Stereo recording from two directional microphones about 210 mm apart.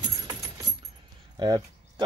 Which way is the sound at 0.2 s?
20° right (ahead or behind).